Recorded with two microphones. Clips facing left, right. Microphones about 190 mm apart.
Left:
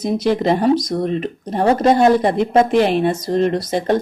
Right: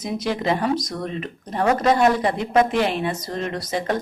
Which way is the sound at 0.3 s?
35° left (ahead or behind).